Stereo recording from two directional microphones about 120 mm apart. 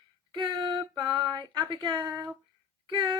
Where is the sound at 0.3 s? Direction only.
40° right (ahead or behind).